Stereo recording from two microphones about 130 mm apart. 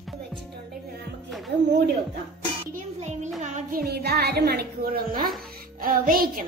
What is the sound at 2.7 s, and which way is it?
Music, 65° right (ahead or behind).